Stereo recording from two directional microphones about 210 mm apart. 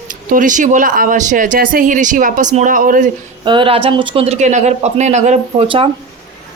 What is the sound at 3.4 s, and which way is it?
Speech, 25° right (ahead or behind).